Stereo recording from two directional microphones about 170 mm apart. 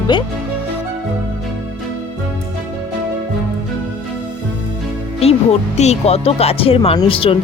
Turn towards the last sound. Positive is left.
turn(degrees=35)  # may be behind; listen again after turning